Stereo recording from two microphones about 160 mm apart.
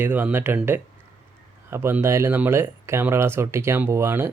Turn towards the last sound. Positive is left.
turn(degrees=-15)  # may be behind; listen again after turning